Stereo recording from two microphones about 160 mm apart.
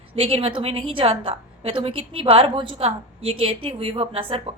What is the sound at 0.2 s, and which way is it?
A woman's voice, 40° right (ahead or behind).